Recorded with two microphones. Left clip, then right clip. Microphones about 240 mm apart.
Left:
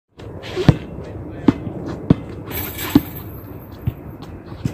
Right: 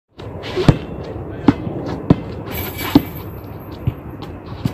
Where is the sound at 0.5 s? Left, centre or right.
Centre.